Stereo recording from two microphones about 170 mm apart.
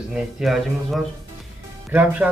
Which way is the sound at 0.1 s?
5° right (ahead or behind).